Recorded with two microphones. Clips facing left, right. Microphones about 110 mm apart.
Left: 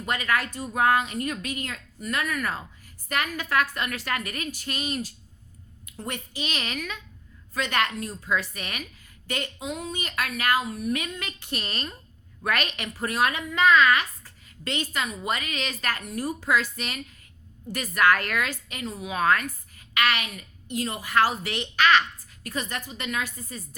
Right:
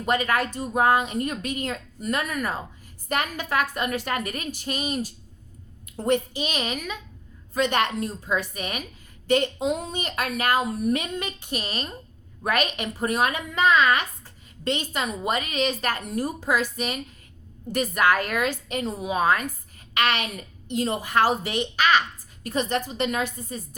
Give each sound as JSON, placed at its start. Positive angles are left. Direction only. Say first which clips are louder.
{"t": 0.0, "sound": "a woman's voice", "louder": "right 4 dB", "side_deg": -25}
{"t": 2.4, "sound": "a woman's voice", "louder": "right 2 dB", "side_deg": -15}
{"t": 6.0, "sound": "a woman's voice", "louder": "right 12 dB", "side_deg": -30}
{"t": 6.3, "sound": "a woman's voice", "louder": "right 4 dB", "side_deg": -20}
{"t": 18.7, "sound": "a woman's voice", "louder": "right 6 dB", "side_deg": -30}
{"t": 19.2, "sound": "a woman's voice", "louder": "even", "side_deg": -15}
{"t": 19.9, "sound": "a woman's voice", "louder": "right 1 dB", "side_deg": -25}
{"t": 22.4, "sound": "a woman's voice", "louder": "right 7 dB", "side_deg": -25}